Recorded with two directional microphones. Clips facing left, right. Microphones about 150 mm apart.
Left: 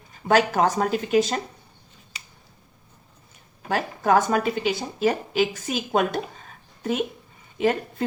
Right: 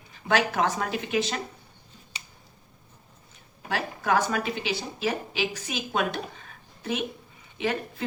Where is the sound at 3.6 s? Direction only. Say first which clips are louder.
Left 5 dB; 45° left (ahead or behind).